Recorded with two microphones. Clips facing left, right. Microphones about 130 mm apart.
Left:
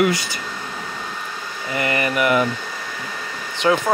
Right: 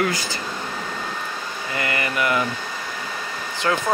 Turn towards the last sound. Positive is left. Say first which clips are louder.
# left 5 dB
turn(degrees=15)  # may be behind; listen again after turning